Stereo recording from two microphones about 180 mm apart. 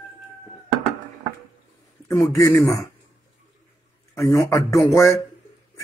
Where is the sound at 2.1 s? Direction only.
15° left (ahead or behind).